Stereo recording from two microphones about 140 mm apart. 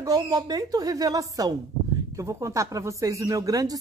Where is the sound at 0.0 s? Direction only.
30° right (ahead or behind).